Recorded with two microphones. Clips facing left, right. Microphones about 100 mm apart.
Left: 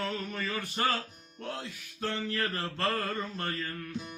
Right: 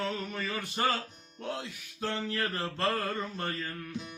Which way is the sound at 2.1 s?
20° right (ahead or behind).